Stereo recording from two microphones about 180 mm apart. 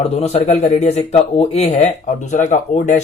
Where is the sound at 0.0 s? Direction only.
35° left (ahead or behind).